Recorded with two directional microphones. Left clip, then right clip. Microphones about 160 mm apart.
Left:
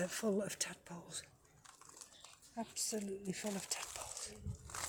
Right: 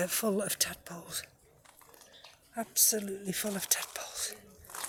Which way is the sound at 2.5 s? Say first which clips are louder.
Right 11 dB; 15° right (ahead or behind).